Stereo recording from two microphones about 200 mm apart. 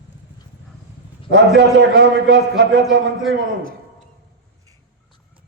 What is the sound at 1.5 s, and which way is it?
A man's voice, 60° right (ahead or behind).